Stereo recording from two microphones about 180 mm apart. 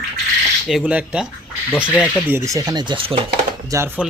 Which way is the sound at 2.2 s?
15° right (ahead or behind).